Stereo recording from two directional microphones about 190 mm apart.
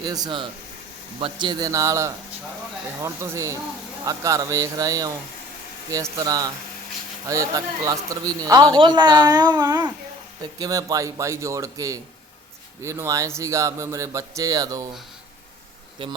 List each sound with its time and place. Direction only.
0.0 s speech: 20° right (ahead or behind)
16.0 s speech: 25° right (ahead or behind)